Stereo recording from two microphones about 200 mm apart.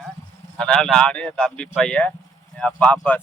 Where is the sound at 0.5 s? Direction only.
5° left (ahead or behind).